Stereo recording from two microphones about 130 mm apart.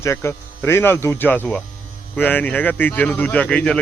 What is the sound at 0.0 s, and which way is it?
Speech, 20° left (ahead or behind).